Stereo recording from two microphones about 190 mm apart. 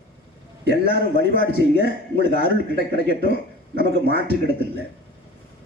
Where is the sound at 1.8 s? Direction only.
50° left (ahead or behind).